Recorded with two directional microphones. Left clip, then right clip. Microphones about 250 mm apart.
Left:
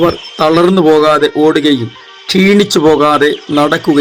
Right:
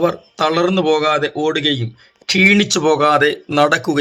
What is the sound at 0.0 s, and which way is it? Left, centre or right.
Speech, left.